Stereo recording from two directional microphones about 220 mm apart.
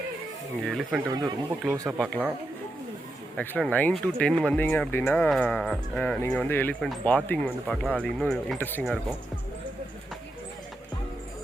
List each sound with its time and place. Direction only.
0.6 s speech: centre (ahead or behind)
1.0 s speech: 15° right (ahead or behind)
1.9 s speech: centre (ahead or behind)
3.3 s speech: 5° left (ahead or behind)